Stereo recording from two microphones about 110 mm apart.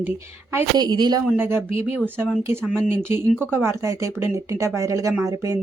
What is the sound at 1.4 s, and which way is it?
Speech, 20° right (ahead or behind).